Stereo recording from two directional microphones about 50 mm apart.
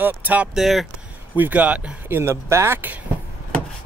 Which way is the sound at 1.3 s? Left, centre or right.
Right.